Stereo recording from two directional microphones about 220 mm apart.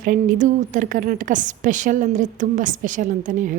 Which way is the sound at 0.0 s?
40° right (ahead or behind).